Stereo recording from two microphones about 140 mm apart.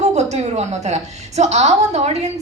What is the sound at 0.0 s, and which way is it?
A woman's voice, 55° right (ahead or behind).